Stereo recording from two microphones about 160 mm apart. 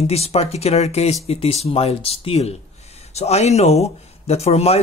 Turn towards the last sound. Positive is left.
turn(degrees=40)  # may be behind; listen again after turning